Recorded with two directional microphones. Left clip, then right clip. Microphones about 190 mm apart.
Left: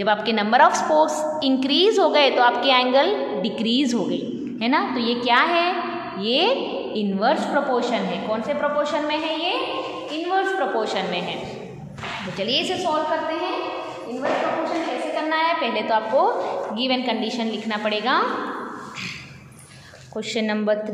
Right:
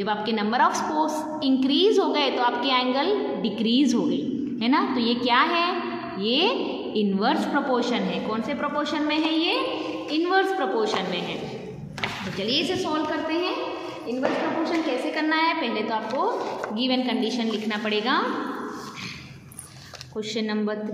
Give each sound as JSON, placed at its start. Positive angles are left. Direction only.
{"t": 0.0, "sound": "a woman's voice", "side_deg": 10}
{"t": 10.8, "sound": "a woman's voice", "side_deg": 0}
{"t": 12.4, "sound": "a woman's voice", "side_deg": 5}
{"t": 15.1, "sound": "a sound", "side_deg": -10}
{"t": 15.6, "sound": "a woman's voice", "side_deg": 5}
{"t": 20.3, "sound": "a woman's voice", "side_deg": 15}